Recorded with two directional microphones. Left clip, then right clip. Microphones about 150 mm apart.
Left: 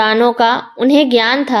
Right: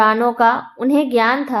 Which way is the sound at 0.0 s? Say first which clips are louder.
Left 2 dB; 40° left (ahead or behind).